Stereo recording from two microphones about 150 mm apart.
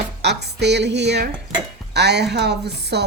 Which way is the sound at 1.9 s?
90° right.